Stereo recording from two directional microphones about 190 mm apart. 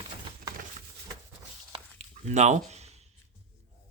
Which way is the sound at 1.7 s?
35° right (ahead or behind).